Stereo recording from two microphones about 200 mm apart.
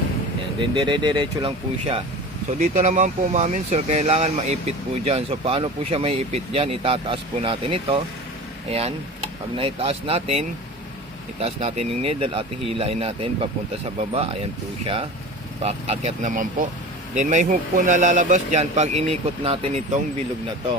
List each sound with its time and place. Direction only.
0.7 s speech: 25° right (ahead or behind)
9.6 s speech: 30° right (ahead or behind)
15.6 s speech: 30° right (ahead or behind)